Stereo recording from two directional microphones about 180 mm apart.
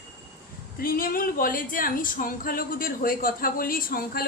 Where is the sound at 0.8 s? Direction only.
55° left (ahead or behind).